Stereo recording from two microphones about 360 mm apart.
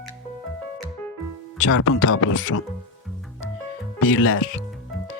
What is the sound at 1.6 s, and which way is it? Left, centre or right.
Speech, left.